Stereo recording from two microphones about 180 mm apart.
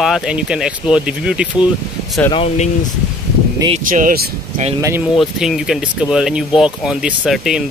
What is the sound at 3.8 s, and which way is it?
Speech, 50° right (ahead or behind).